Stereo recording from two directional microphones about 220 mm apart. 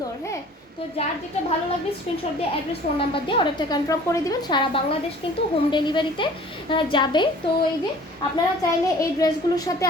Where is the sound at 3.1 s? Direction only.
25° left (ahead or behind).